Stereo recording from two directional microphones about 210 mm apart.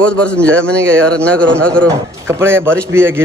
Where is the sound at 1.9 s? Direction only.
10° right (ahead or behind).